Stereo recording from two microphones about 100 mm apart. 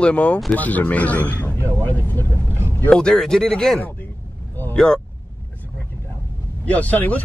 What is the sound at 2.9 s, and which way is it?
Speech, 5° left (ahead or behind).